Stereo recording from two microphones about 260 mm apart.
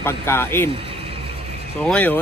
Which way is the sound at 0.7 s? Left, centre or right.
Right.